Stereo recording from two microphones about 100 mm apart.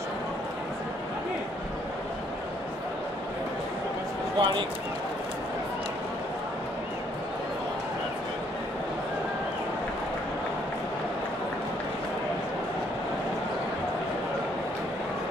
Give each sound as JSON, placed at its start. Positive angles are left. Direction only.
{"t": 4.4, "sound": "speech", "side_deg": -55}